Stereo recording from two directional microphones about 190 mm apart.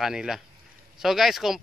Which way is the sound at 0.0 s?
Centre (ahead or behind).